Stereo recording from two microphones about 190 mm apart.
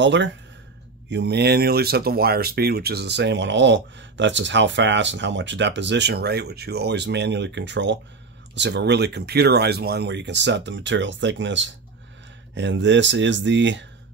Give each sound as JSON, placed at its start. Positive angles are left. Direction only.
{"t": 0.0, "sound": "speech", "side_deg": -70}